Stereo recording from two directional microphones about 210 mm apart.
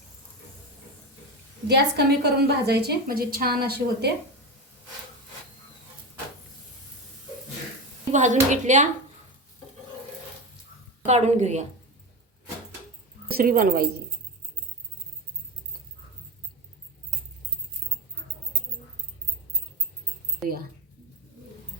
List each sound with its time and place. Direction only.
1.6 s a woman's voice: 50° right (ahead or behind)
8.1 s speech: 35° right (ahead or behind)
11.0 s speech: 35° right (ahead or behind)
13.3 s a woman's voice: 45° right (ahead or behind)